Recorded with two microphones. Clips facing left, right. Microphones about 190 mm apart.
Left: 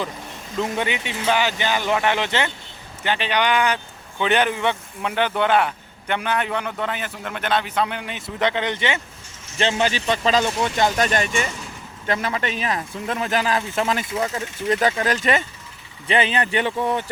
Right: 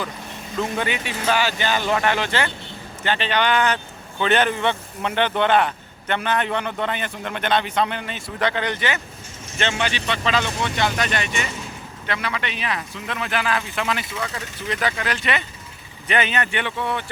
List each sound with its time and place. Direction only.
0.6 s speech: 20° left (ahead or behind)
9.6 s a man's voice: 35° left (ahead or behind)
16.0 s a man's voice: 30° left (ahead or behind)